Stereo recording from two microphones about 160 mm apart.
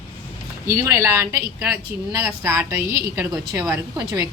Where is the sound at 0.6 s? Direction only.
20° right (ahead or behind).